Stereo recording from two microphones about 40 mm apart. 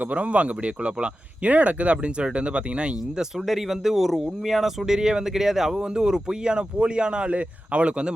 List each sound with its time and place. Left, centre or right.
0.0 s speech: right
1.5 s speech: right
3.3 s speech: centre; by 8.1 s right